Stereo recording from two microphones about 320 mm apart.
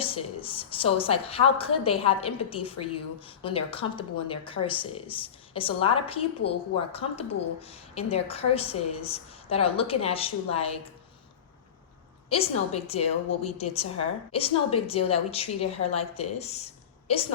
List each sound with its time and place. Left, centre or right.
0.0 s speech: centre
12.3 s a woman's voice: centre